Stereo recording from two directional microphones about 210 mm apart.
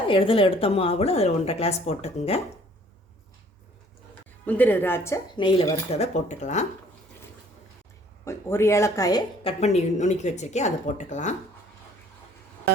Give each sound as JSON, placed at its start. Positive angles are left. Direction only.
{"t": 0.1, "sound": "a woman's voice", "side_deg": 25}
{"t": 4.4, "sound": "a woman's voice", "side_deg": 10}
{"t": 5.4, "sound": "speech", "side_deg": 25}
{"t": 8.2, "sound": "speech", "side_deg": 10}